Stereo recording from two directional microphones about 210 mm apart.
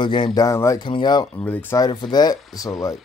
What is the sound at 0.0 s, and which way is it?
Speech, 20° left (ahead or behind).